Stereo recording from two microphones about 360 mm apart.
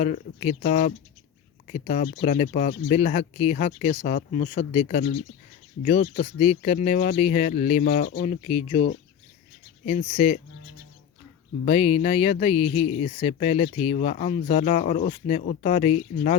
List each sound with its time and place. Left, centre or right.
0.0 s speech: centre
9.8 s speech: centre
11.6 s speech: centre